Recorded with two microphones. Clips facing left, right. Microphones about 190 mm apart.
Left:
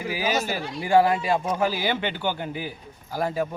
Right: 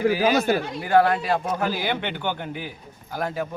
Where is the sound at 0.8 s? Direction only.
10° left (ahead or behind).